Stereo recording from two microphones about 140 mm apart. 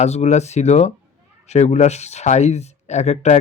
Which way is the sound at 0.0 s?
50° left (ahead or behind).